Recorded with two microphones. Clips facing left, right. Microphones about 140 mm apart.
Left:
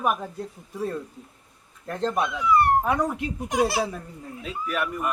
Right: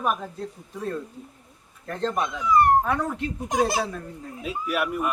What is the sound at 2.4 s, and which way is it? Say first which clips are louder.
Speech: right 2 dB; 40° right (ahead or behind).